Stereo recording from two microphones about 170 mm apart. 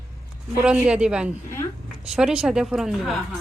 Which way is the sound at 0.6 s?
5° right (ahead or behind).